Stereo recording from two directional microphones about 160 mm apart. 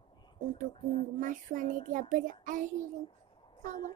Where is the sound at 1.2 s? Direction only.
55° right (ahead or behind).